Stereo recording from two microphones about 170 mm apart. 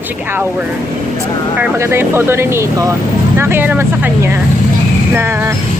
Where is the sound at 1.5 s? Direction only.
15° right (ahead or behind).